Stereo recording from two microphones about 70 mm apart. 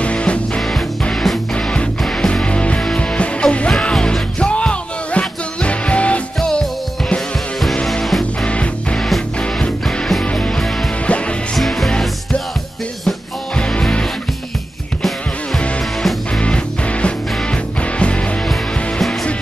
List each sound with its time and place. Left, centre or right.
0.0 s music: centre
0.6 s music: centre
1.5 s music: centre
7.7 s music: centre
11.5 s music: centre
13.6 s music: centre
16.3 s music: centre
18.5 s music: centre